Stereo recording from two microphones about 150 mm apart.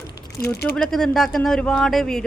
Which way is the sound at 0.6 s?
5° left (ahead or behind).